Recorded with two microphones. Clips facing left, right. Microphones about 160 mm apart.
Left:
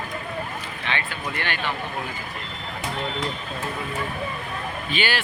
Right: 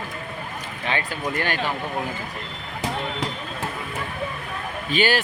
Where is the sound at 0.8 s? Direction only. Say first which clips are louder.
Right 4 dB; 40° right (ahead or behind).